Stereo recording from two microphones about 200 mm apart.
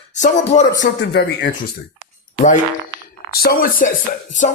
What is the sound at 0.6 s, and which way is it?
Speech, 20° left (ahead or behind).